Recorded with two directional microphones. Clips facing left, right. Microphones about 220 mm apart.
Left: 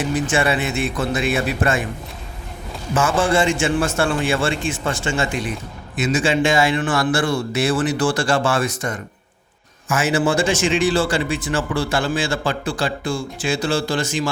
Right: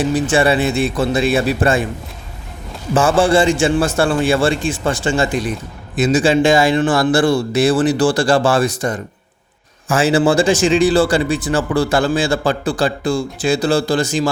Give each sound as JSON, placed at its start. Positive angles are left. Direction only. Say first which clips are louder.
{"t": 0.3, "sound": "speech", "louder": "right 5 dB", "side_deg": -35}
{"t": 2.9, "sound": "speech", "louder": "right 5 dB", "side_deg": -30}